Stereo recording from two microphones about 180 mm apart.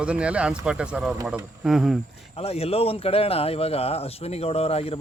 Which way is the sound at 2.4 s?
35° left (ahead or behind).